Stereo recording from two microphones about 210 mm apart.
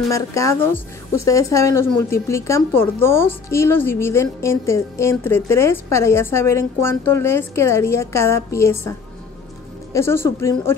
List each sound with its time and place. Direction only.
0.1 s a woman's voice: 15° left (ahead or behind)
9.9 s a woman's voice: 10° left (ahead or behind)